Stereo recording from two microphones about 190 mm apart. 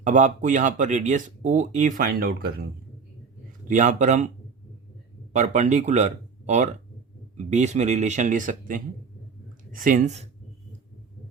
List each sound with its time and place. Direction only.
0.0 s speech: 40° right (ahead or behind)
3.7 s speech: 40° right (ahead or behind)
5.3 s speech: 40° right (ahead or behind)